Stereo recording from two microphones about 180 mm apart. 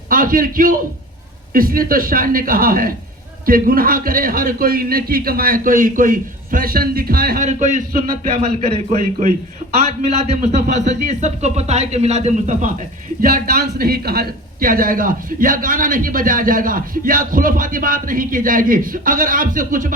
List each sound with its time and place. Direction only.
0.1 s a man's voice: 50° right (ahead or behind)
8.4 s a man's voice: 35° right (ahead or behind)
13.2 s a man's voice: 55° right (ahead or behind)